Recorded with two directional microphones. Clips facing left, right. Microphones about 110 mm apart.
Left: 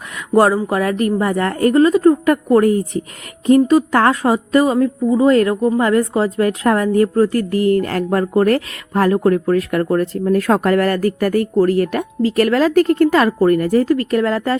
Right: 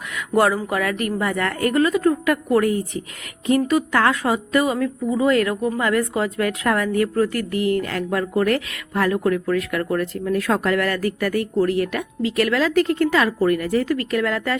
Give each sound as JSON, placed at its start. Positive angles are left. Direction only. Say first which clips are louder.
{"t": 0.3, "sound": "speech", "louder": "left 5 dB", "side_deg": 30}